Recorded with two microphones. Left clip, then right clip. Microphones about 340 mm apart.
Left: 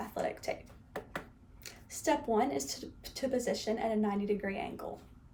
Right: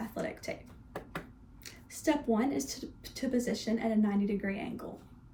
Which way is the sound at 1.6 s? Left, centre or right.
Centre.